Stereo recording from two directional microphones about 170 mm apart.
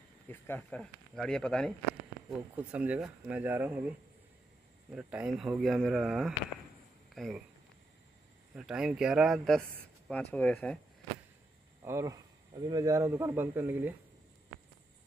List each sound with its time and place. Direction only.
0.3 s speech: 10° left (ahead or behind)
2.2 s speech: 10° right (ahead or behind)
4.9 s speech: 5° right (ahead or behind)
8.5 s speech: 5° right (ahead or behind)
11.8 s speech: 15° right (ahead or behind)